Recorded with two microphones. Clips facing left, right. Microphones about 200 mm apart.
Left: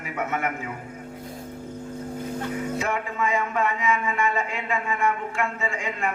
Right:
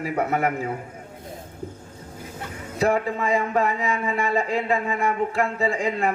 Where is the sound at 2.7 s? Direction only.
35° right (ahead or behind).